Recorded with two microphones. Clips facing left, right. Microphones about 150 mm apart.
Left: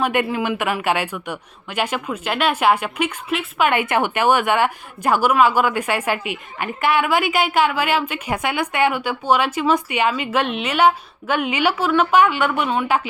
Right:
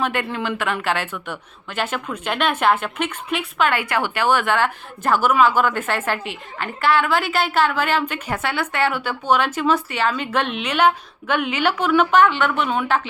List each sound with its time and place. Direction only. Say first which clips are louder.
0.0 s a woman's voice: left 3 dB; 15° left (ahead or behind)
3.7 s a woman's voice: left 3 dB; 20° left (ahead or behind); by 12.9 s centre (ahead or behind)